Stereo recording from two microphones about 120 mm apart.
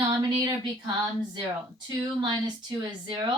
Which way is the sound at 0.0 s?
35° right (ahead or behind).